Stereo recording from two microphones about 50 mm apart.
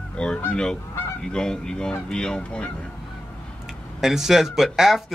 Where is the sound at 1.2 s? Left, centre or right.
Centre.